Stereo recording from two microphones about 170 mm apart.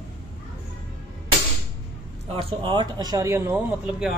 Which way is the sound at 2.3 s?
30° right (ahead or behind).